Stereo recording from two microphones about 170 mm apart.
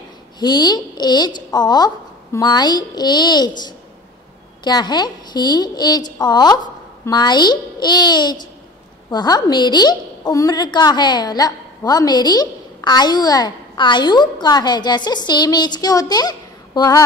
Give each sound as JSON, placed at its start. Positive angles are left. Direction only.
{"t": 0.4, "sound": "a woman's voice", "side_deg": 25}